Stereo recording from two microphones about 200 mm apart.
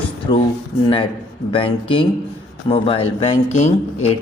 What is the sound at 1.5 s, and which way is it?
Speech, 25° left (ahead or behind).